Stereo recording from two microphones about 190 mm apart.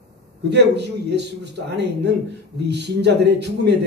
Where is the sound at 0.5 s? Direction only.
65° right (ahead or behind).